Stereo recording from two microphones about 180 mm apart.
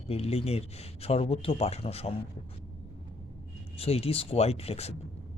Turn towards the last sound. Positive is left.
turn(degrees=35)  # may be behind; listen again after turning